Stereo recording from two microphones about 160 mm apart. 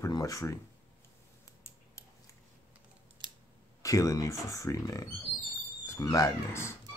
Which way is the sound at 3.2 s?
30° right (ahead or behind).